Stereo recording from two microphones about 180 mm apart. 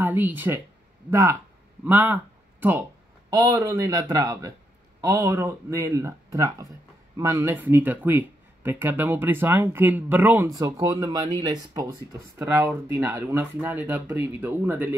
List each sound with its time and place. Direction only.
0.0 s speech: 10° right (ahead or behind)
1.9 s speech: 10° right (ahead or behind)
3.3 s speech: 20° right (ahead or behind)